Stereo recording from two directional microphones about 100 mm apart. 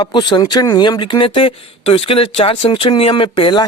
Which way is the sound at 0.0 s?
50° left (ahead or behind).